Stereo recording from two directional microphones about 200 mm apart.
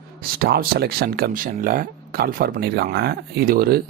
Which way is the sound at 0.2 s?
50° right (ahead or behind).